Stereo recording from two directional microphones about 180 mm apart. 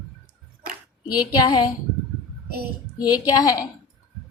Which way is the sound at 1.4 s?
20° left (ahead or behind).